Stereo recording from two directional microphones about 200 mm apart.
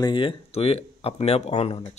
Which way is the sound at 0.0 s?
25° left (ahead or behind).